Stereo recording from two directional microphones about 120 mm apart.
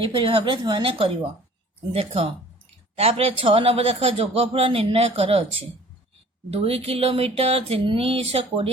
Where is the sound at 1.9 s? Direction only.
55° right (ahead or behind).